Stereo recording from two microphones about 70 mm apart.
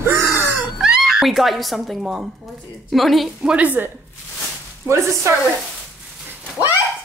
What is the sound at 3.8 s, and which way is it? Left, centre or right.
Speech, right.